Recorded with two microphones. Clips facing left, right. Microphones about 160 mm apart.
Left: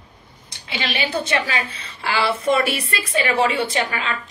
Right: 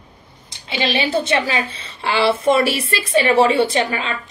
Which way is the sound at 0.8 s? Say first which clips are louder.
Right 5 dB; 25° right (ahead or behind).